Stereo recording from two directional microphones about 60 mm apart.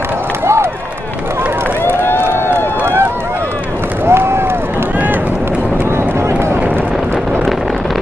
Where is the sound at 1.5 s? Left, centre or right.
Right.